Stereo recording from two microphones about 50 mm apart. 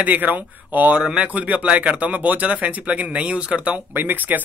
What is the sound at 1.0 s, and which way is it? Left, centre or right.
Speech, centre.